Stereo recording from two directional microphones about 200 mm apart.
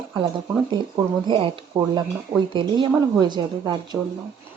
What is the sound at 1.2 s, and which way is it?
A woman's voice, 25° right (ahead or behind).